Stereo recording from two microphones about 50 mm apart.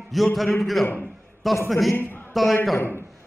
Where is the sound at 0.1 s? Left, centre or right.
Centre.